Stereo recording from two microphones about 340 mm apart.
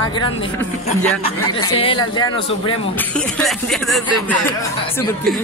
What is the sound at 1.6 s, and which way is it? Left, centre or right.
Speech, centre.